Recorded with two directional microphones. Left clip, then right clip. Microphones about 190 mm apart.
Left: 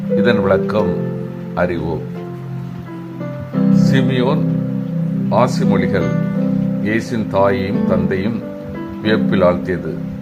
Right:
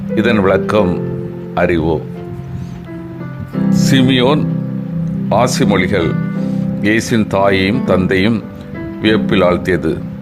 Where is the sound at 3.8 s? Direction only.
30° right (ahead or behind).